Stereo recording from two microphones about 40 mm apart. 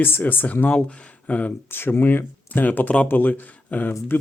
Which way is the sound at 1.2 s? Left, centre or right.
Left.